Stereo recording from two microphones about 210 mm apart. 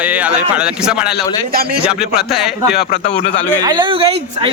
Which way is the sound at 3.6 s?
20° right (ahead or behind).